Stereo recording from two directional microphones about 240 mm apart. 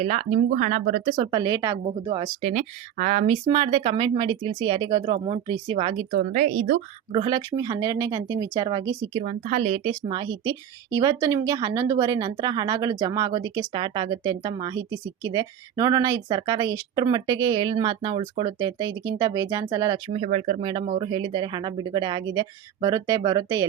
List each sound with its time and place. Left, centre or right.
0.0 s speech: right
1.1 s speech: centre
2.4 s speech: right
9.1 s speech: right
20.1 s speech: right